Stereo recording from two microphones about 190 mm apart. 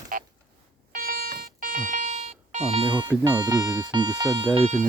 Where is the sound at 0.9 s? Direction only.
50° right (ahead or behind); by 4.7 s 30° right (ahead or behind).